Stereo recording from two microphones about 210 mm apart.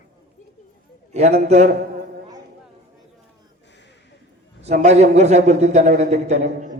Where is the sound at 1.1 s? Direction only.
30° right (ahead or behind).